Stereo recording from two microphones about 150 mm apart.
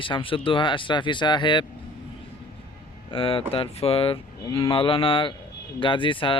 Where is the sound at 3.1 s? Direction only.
35° left (ahead or behind).